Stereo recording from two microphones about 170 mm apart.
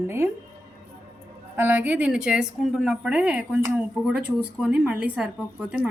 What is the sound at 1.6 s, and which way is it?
A woman's voice, 10° right (ahead or behind).